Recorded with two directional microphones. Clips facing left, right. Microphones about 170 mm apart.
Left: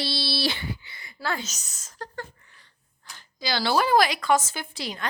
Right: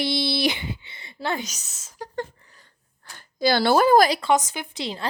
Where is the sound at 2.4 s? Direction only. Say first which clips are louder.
Right 3 dB; 40° right (ahead or behind).